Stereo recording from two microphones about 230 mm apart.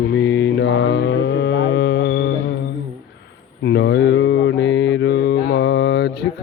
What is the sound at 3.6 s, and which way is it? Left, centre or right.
Mantra, left.